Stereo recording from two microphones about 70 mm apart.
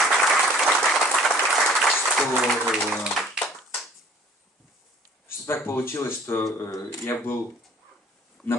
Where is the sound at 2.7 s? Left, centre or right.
Centre.